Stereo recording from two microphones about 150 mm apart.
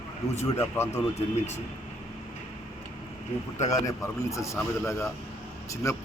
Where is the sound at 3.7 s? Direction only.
20° left (ahead or behind).